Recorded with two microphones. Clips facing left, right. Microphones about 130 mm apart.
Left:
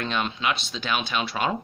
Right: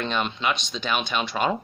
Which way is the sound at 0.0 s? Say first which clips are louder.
Right 1 dB; centre (ahead or behind).